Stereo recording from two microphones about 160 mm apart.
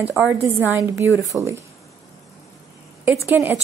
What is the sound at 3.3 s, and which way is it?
Speech, 15° right (ahead or behind).